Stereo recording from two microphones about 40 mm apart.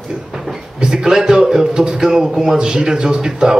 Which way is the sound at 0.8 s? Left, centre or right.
Centre.